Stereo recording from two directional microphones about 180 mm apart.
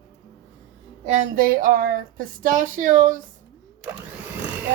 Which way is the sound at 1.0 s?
45° right (ahead or behind).